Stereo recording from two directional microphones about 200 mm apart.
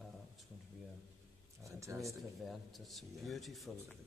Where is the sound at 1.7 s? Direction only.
15° right (ahead or behind).